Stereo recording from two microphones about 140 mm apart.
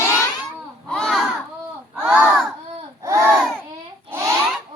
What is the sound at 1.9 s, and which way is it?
Battle cry, 10° right (ahead or behind).